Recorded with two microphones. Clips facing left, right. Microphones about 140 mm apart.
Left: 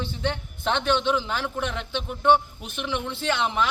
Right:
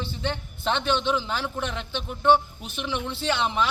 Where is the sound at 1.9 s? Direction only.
15° left (ahead or behind).